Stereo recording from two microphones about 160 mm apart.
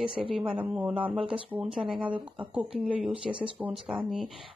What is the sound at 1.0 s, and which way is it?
Speech, 35° right (ahead or behind).